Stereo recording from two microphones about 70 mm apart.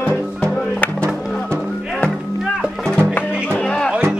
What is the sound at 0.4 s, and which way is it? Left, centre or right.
Music, centre.